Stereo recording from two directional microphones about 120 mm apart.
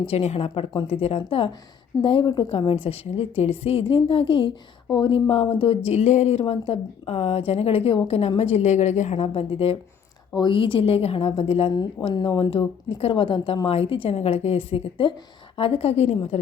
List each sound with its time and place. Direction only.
0.1 s a woman's voice: 60° left (ahead or behind)
6.4 s a woman's voice: 50° left (ahead or behind)
10.3 s speech: 40° left (ahead or behind)
12.0 s a woman's voice: 40° left (ahead or behind); by 16.4 s 60° left (ahead or behind)